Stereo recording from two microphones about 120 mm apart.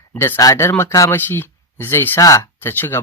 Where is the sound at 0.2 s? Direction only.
25° left (ahead or behind).